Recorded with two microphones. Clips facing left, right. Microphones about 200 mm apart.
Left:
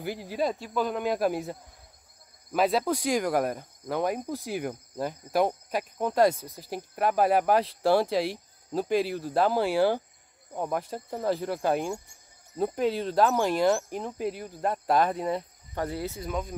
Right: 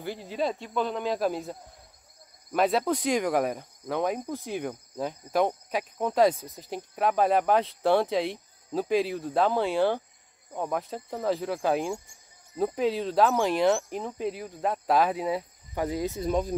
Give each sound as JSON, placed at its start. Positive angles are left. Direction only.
{"t": 0.0, "sound": "speech", "side_deg": 10}
{"t": 16.3, "sound": "speech", "side_deg": -30}